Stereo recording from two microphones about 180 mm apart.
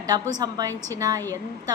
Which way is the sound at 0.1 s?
20° right (ahead or behind).